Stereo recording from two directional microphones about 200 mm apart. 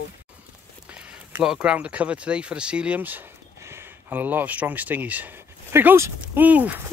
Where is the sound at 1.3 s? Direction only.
5° right (ahead or behind).